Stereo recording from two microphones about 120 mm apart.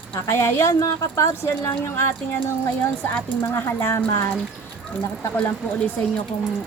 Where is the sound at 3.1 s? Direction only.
15° left (ahead or behind).